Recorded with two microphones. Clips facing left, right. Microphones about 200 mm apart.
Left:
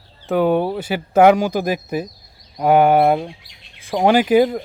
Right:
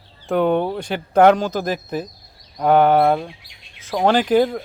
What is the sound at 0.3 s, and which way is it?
Speech, 5° left (ahead or behind).